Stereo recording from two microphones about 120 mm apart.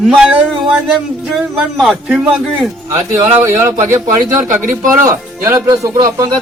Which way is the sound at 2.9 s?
25° right (ahead or behind).